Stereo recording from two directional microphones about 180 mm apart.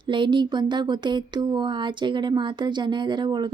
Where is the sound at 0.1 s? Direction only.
25° right (ahead or behind).